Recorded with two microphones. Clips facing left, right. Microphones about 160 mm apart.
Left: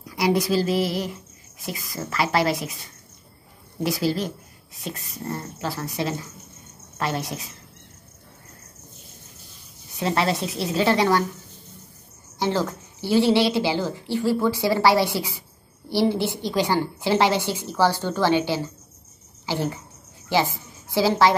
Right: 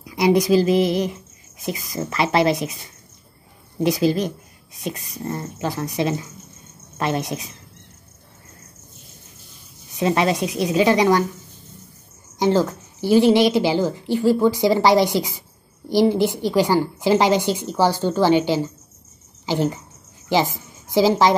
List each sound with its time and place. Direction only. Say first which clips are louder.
0.0 s speech: right 5 dB; 20° right (ahead or behind)
3.8 s a woman's voice: right 5 dB; 20° right (ahead or behind)
9.9 s a woman's voice: right 4 dB; 15° right (ahead or behind)
12.4 s a woman's voice: right 6 dB; 15° right (ahead or behind)
20.9 s a woman's voice: right 3 dB; 15° right (ahead or behind)